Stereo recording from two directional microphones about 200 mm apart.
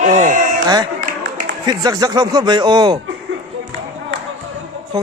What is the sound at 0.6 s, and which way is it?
Speech, 20° right (ahead or behind).